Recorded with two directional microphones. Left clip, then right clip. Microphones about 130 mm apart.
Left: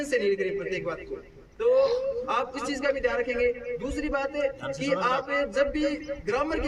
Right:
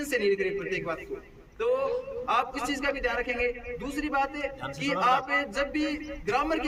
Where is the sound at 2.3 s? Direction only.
25° right (ahead or behind).